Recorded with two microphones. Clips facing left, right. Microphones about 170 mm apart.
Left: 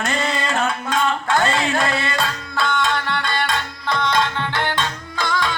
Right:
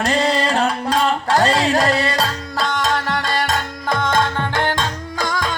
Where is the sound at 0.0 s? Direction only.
35° right (ahead or behind).